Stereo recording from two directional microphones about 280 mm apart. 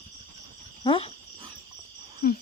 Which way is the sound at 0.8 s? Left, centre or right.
Centre.